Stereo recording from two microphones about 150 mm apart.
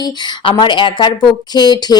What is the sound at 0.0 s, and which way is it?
Speech, 30° left (ahead or behind).